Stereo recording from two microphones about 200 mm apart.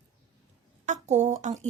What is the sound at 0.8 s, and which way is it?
Speech, 35° right (ahead or behind).